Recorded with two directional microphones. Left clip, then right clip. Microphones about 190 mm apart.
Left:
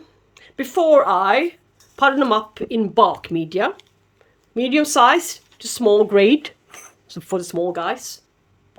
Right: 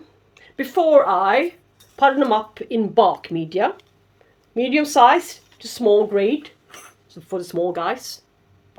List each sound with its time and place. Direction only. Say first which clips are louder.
0.3 s a woman's voice: even; 25° left (ahead or behind); by 6.1 s 40° left (ahead or behind)
6.1 s speech: left 5 dB; 60° left (ahead or behind)
7.3 s speech: left 2 dB; 30° left (ahead or behind)
7.6 s speech: right 3 dB; 15° left (ahead or behind)